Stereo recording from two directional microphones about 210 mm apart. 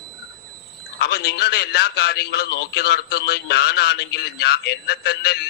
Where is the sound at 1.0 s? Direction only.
50° left (ahead or behind).